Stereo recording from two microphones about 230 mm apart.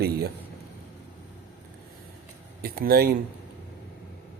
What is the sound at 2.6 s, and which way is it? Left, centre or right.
Speech, right.